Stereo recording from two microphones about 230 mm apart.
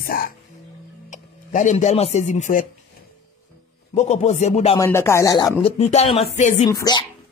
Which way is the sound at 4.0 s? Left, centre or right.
Left.